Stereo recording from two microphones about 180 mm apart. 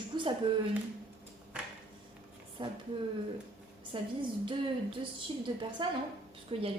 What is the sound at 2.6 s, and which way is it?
Speech, 25° right (ahead or behind).